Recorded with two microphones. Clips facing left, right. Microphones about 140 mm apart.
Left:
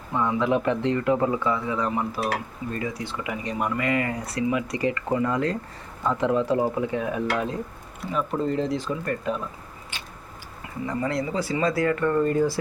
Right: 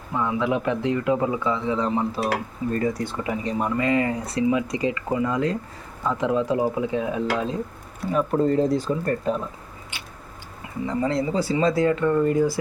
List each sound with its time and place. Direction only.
0.1 s speech: 5° right (ahead or behind); by 2.2 s 25° right (ahead or behind)
2.7 s speech: 45° right (ahead or behind); by 7.6 s 20° right (ahead or behind)
8.1 s speech: 40° right (ahead or behind)
10.8 s speech: 25° right (ahead or behind)